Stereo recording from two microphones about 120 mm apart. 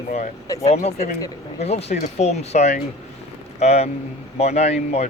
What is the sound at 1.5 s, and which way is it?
Speech, 65° left (ahead or behind).